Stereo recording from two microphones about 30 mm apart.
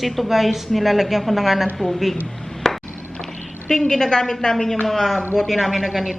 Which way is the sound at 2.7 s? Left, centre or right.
Centre.